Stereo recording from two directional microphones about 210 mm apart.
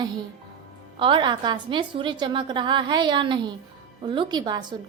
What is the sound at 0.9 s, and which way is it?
A woman's voice, 25° right (ahead or behind).